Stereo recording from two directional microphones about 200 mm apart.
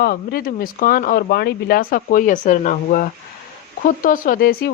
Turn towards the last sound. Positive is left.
turn(degrees=50)  # may be behind; listen again after turning